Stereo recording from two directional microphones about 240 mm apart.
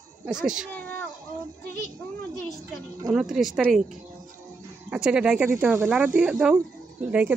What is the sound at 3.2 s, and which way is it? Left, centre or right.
Speech, centre.